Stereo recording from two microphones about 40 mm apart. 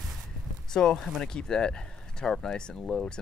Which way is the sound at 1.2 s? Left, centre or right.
Centre.